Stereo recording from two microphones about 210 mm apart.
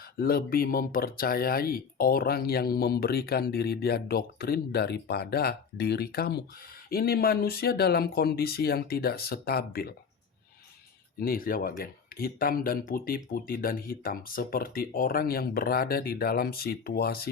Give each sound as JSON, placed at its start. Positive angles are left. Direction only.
{"t": 0.2, "sound": "speech", "side_deg": 45}
{"t": 11.2, "sound": "speech", "side_deg": 45}